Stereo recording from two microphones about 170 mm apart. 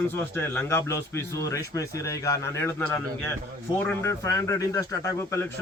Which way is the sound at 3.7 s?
15° left (ahead or behind).